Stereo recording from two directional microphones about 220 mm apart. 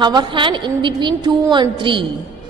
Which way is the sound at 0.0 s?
20° right (ahead or behind).